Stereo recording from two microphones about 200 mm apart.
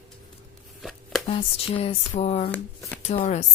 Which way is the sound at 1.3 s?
30° left (ahead or behind).